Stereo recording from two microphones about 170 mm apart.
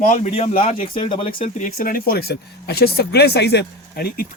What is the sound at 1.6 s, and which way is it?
Speech, 60° left (ahead or behind).